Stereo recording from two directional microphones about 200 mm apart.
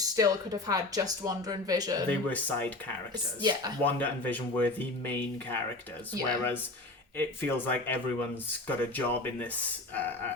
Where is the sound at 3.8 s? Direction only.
10° left (ahead or behind).